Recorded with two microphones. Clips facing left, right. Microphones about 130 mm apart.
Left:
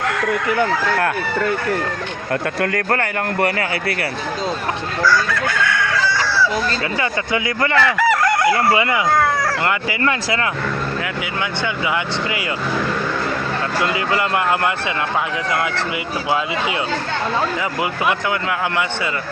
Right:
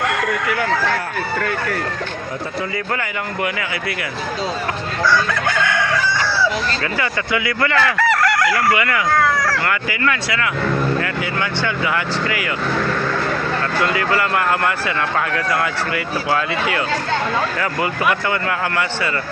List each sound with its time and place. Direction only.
2.6 s speech: 85° left
3.0 s a man's voice: 40° left (ahead or behind)
7.0 s speech: 25° left (ahead or behind)
7.9 s chicken: 15° left (ahead or behind)
8.4 s speech: 25° left (ahead or behind)
10.0 s a man's voice: 30° left (ahead or behind)
13.7 s speech: 20° left (ahead or behind)
16.3 s speech: 20° left (ahead or behind)